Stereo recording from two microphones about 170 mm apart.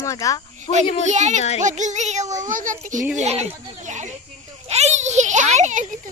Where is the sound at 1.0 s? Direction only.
45° right (ahead or behind).